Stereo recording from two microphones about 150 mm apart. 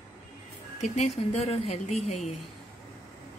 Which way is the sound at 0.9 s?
45° left (ahead or behind).